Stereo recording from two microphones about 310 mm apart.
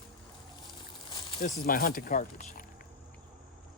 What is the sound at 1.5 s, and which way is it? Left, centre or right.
Speech, left.